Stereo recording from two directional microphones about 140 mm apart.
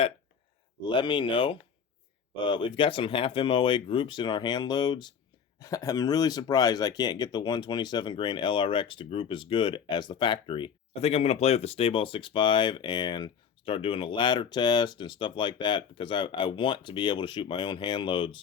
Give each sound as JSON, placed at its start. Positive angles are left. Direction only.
{"t": 0.9, "sound": "speech", "side_deg": 35}